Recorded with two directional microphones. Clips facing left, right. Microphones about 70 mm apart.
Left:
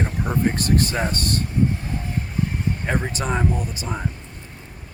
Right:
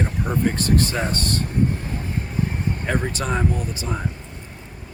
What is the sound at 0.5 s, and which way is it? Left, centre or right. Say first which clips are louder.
Speech: even; right.